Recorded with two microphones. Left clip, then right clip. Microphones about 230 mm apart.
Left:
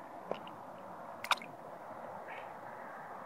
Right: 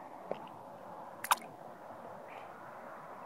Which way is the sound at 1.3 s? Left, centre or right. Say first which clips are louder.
Right 2 dB; right.